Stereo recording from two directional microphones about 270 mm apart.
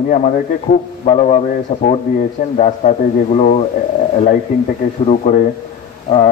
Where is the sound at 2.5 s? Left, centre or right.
Left.